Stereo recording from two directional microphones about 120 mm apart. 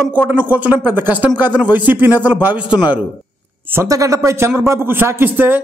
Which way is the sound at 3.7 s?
25° right (ahead or behind).